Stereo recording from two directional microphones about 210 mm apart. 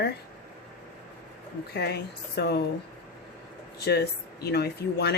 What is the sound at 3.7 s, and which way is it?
Speech, 50° left (ahead or behind).